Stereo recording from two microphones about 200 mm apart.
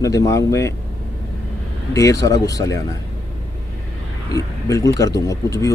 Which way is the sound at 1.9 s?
15° left (ahead or behind).